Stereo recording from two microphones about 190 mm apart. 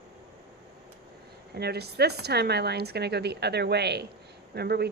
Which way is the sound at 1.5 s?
60° right (ahead or behind).